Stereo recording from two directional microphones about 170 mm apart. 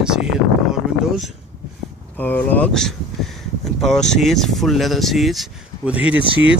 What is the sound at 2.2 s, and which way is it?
Speech, 10° left (ahead or behind).